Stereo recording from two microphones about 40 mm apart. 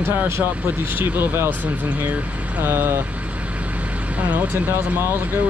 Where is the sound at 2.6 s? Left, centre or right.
Right.